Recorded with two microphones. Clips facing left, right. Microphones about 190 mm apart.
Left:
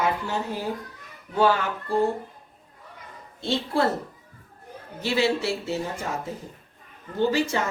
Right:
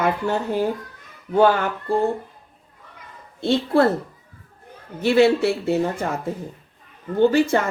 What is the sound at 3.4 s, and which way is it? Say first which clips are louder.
Speech: right 7 dB; 55° right (ahead or behind).